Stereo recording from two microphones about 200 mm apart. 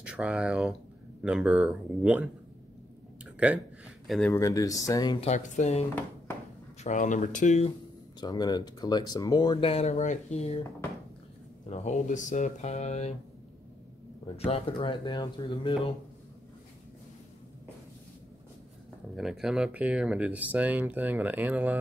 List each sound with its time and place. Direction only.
0.0 s speech: 5° right (ahead or behind)
3.3 s a sound: 5° right (ahead or behind)
4.3 s speech: 15° left (ahead or behind)
5.3 s speech: 35° left (ahead or behind)
6.3 s a sound: 10° left (ahead or behind)
6.8 s speech: 40° left (ahead or behind)
8.2 s speech: 20° left (ahead or behind)
11.7 s speech: 35° left (ahead or behind)
14.2 s speech: 30° left (ahead or behind)
19.1 s speech: centre (ahead or behind)